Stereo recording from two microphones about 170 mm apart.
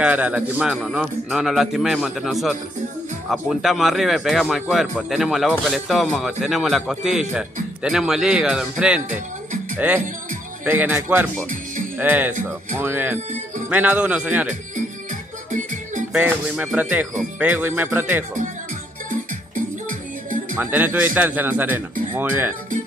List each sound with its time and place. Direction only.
0.0 s a man's voice: 10° right (ahead or behind)
15.5 s music: 50° right (ahead or behind)
16.1 s a man's voice: 5° right (ahead or behind)
19.0 s music: 50° right (ahead or behind)
20.5 s a man's voice: 10° right (ahead or behind)